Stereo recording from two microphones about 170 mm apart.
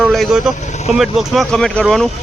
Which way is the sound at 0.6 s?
45° left (ahead or behind).